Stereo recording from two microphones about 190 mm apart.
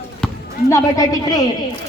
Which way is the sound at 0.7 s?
15° left (ahead or behind).